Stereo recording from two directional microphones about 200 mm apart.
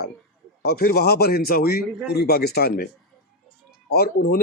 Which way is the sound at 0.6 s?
50° left (ahead or behind).